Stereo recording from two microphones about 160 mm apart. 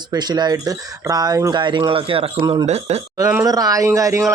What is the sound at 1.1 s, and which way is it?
Speech, 25° right (ahead or behind).